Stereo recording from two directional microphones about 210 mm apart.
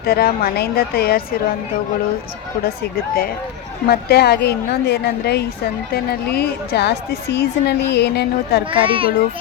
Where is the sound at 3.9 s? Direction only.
50° left (ahead or behind).